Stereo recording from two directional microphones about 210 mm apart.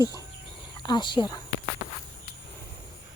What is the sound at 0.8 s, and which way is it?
Speech, 20° left (ahead or behind).